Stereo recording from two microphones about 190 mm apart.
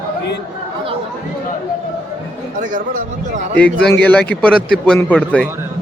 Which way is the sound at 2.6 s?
45° right (ahead or behind).